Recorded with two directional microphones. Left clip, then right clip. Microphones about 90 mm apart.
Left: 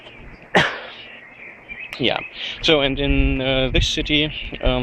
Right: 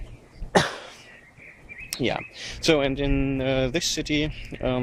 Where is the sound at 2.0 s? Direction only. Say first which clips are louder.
Left 6 dB; 45° right (ahead or behind).